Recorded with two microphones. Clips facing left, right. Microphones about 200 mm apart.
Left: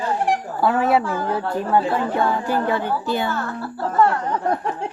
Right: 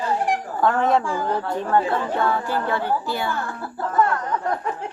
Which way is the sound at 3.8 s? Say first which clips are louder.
Left 2 dB; 30° left (ahead or behind).